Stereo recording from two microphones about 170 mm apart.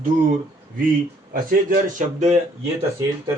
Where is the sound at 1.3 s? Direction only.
55° right (ahead or behind).